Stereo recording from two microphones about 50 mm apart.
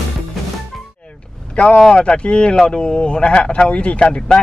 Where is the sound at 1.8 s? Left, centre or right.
Centre.